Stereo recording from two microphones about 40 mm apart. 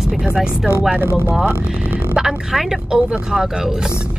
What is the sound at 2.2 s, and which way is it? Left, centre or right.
A woman's voice, centre.